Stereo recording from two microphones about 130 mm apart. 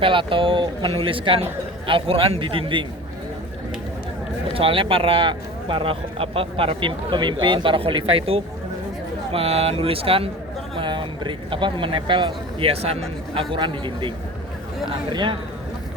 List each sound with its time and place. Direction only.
0.0 s a man's voice: 40° right (ahead or behind)
4.5 s a man's voice: 45° right (ahead or behind)
13.5 s a man's voice: 40° right (ahead or behind)